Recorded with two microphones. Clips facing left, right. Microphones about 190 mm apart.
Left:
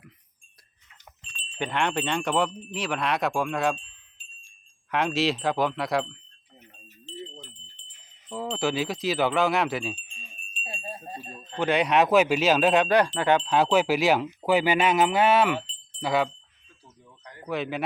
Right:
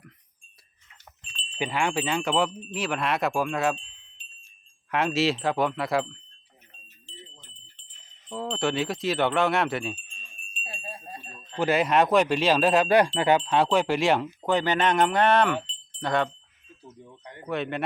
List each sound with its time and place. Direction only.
1.5 s speech: 5° right (ahead or behind)
4.9 s speech: centre (ahead or behind)
8.3 s speech: centre (ahead or behind)
10.6 s wind chime: 20° left (ahead or behind)
11.5 s speech: 5° right (ahead or behind)
15.6 s wind chime: 5° left (ahead or behind)
17.0 s a sound: 25° right (ahead or behind)
17.4 s speech: centre (ahead or behind)